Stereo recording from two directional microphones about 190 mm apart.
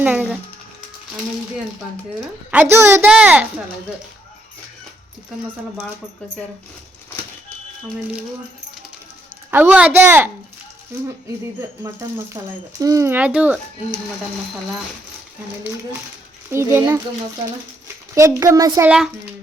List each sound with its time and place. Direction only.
0.0 s a child's voice: 10° right (ahead or behind)
2.5 s a child's voice: 10° right (ahead or behind)
9.5 s a child's voice: 10° right (ahead or behind)
12.4 s a child's voice: 20° right (ahead or behind)
16.5 s a child's voice: 15° right (ahead or behind)
18.1 s a child's voice: 15° right (ahead or behind)
18.9 s a child's voice: 5° right (ahead or behind)